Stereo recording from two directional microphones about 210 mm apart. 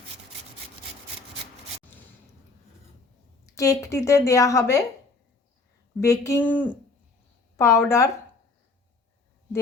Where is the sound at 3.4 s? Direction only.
15° left (ahead or behind).